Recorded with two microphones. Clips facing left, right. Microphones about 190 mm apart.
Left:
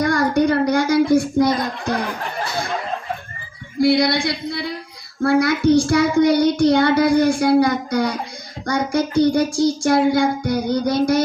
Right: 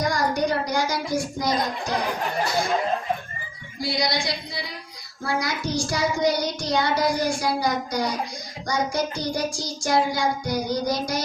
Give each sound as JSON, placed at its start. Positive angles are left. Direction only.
{"t": 0.0, "sound": "a sound", "side_deg": 60}
{"t": 3.8, "sound": "female singing", "side_deg": 60}
{"t": 5.4, "sound": "child singing", "side_deg": 60}